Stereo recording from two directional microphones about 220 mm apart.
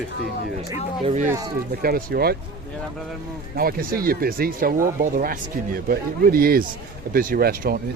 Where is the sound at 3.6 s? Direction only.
40° right (ahead or behind).